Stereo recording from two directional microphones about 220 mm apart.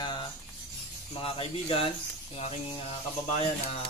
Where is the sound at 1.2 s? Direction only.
25° left (ahead or behind).